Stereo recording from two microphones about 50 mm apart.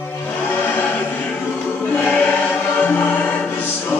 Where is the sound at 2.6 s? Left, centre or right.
Left.